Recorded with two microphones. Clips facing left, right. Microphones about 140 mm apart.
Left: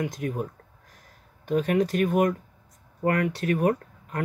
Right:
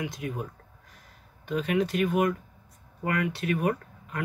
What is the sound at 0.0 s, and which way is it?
Speech, 45° left (ahead or behind).